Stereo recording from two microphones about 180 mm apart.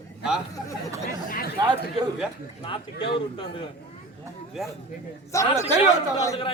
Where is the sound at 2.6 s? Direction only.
30° left (ahead or behind).